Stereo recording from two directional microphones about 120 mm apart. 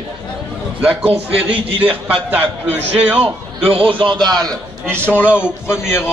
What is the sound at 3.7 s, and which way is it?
Speech, 45° right (ahead or behind).